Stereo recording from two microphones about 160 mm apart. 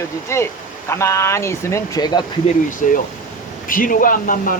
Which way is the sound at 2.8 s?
55° left (ahead or behind).